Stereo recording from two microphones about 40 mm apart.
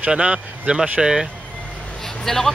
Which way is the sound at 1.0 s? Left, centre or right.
Centre.